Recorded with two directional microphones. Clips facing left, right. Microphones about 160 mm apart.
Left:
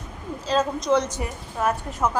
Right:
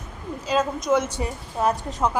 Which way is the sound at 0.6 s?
5° right (ahead or behind).